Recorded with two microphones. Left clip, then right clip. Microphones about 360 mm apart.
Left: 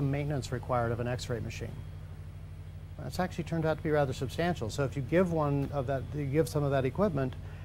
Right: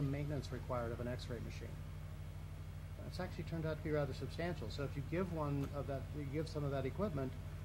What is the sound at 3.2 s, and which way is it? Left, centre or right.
Speech, left.